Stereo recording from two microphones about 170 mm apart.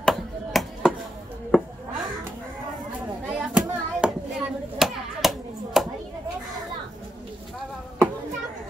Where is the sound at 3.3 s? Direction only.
5° right (ahead or behind).